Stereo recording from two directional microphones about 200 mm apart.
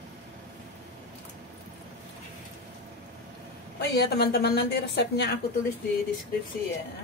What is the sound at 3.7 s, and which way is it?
A woman's voice, 55° left (ahead or behind).